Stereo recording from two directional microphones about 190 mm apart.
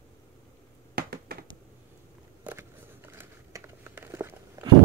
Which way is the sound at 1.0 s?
55° right (ahead or behind).